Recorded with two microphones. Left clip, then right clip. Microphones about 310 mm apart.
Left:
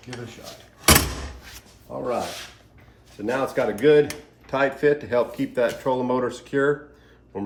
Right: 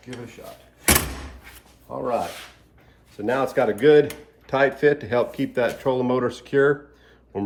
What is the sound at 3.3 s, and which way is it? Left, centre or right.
Speech, right.